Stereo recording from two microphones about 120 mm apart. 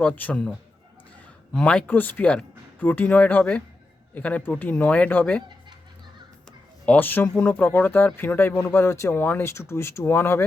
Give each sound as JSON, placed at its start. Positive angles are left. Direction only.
{"t": 0.0, "sound": "speech", "side_deg": 15}
{"t": 1.5, "sound": "speech", "side_deg": 10}
{"t": 6.8, "sound": "speech", "side_deg": 15}